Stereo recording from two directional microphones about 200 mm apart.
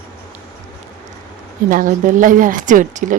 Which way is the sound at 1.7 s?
40° right (ahead or behind).